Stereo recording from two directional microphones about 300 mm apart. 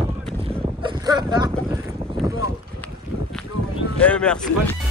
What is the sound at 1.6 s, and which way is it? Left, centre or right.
Boat, centre.